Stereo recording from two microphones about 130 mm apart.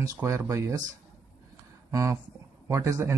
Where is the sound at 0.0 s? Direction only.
20° right (ahead or behind).